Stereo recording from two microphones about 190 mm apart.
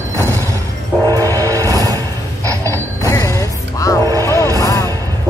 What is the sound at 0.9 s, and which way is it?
Music, 15° left (ahead or behind).